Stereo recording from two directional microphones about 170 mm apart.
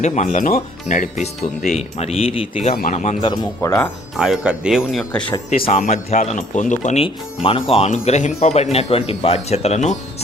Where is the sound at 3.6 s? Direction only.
20° left (ahead or behind).